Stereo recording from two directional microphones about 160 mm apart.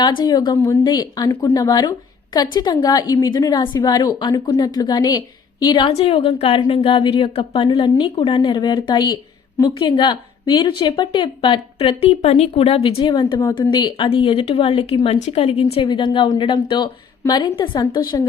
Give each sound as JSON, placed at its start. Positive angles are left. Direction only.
{"t": 0.0, "sound": "a woman's voice", "side_deg": 30}